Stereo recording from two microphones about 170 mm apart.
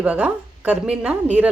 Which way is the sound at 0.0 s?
5° right (ahead or behind).